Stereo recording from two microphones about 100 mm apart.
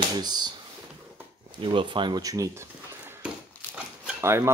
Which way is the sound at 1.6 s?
60° right (ahead or behind).